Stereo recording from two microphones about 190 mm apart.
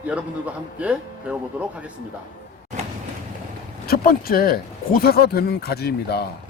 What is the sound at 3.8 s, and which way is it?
Speech, 50° left (ahead or behind).